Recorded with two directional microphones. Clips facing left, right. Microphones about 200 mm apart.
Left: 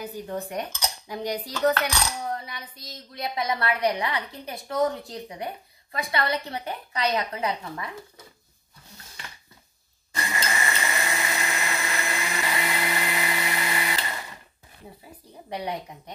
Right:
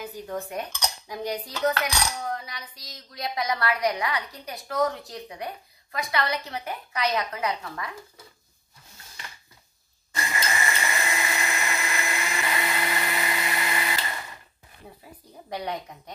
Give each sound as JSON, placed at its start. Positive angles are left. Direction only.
{"t": 0.0, "sound": "cutlery", "side_deg": 35}
{"t": 1.1, "sound": "cutlery", "side_deg": 15}
{"t": 1.4, "sound": "cutlery", "side_deg": 35}
{"t": 2.3, "sound": "a woman's voice", "side_deg": 25}
{"t": 10.1, "sound": "blender", "side_deg": 25}